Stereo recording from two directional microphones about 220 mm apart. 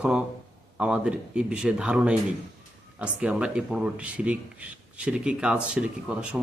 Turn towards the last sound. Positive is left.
turn(degrees=-5)  # may be behind; listen again after turning